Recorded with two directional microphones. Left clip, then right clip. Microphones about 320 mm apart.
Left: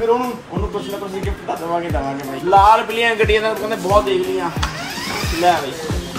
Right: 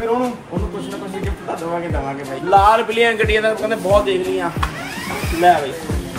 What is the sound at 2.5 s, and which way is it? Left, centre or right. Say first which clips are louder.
A man's voice: left 1 dB; centre.